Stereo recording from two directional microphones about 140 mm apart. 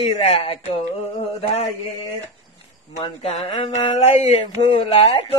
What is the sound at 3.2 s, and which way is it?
Speech, 45° left (ahead or behind).